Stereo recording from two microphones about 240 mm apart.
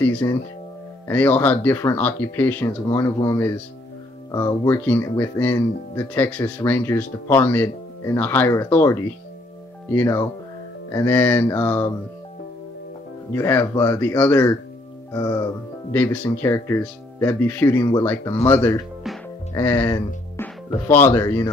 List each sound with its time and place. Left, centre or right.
0.0 s speech: centre
13.3 s speech: centre